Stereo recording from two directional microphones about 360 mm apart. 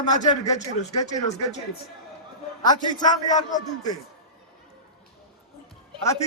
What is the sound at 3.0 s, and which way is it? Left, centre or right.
Speech, centre.